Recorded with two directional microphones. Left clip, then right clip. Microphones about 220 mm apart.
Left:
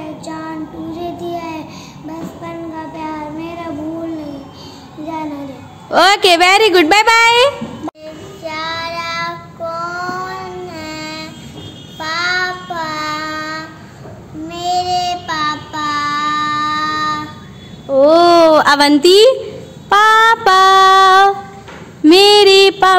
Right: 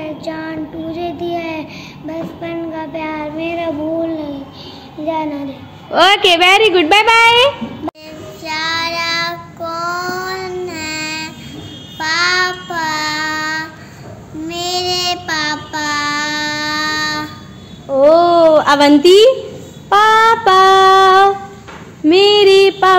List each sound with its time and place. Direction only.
0.0 s child singing: 15° left (ahead or behind)
5.9 s a woman's voice: 30° left (ahead or behind)
8.5 s child singing: 10° left (ahead or behind)
17.8 s a sound: 25° left (ahead or behind)
19.9 s child singing: 35° left (ahead or behind)
22.0 s a sound: 30° left (ahead or behind)